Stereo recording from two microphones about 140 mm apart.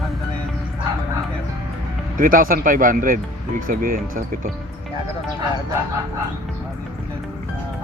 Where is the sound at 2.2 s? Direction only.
80° right.